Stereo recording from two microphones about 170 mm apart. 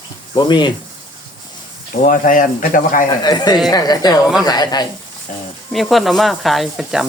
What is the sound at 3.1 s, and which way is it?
Speech, 25° left (ahead or behind).